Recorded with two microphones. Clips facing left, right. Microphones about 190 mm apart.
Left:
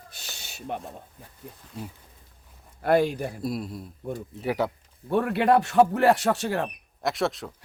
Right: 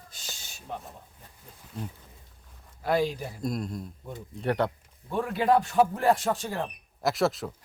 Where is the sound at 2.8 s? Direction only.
55° left (ahead or behind).